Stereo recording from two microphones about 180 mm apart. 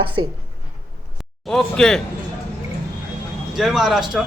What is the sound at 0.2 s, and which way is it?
Speech, 25° right (ahead or behind).